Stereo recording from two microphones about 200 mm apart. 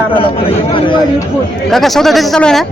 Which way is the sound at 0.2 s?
25° left (ahead or behind).